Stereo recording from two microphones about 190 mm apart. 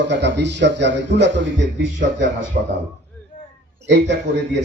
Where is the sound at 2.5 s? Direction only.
40° right (ahead or behind).